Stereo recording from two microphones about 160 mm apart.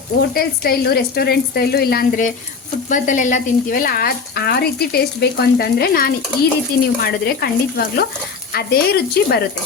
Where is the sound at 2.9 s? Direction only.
50° left (ahead or behind); by 9.4 s 75° left (ahead or behind).